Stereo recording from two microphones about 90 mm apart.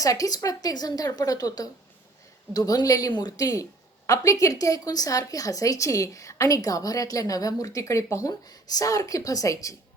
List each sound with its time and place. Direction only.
0.0 s a woman's voice: 40° left (ahead or behind)